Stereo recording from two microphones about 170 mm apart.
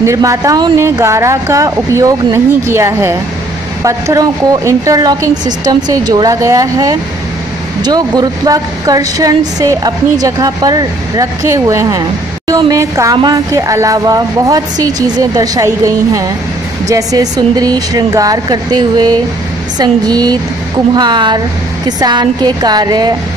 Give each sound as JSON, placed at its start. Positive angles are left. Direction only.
{"t": 0.0, "sound": "speech", "side_deg": -20}
{"t": 4.6, "sound": "a woman's voice", "side_deg": -20}